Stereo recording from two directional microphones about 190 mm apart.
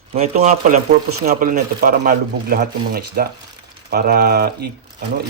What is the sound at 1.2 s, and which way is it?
Speech, 50° right (ahead or behind).